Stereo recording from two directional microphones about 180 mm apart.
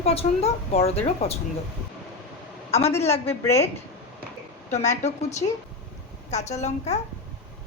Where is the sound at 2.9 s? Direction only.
35° left (ahead or behind).